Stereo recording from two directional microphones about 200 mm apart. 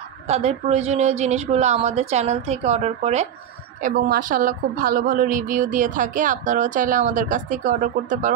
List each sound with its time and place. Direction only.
0.3 s a woman's voice: 30° right (ahead or behind)